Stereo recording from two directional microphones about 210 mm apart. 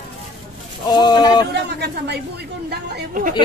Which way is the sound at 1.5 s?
50° right (ahead or behind).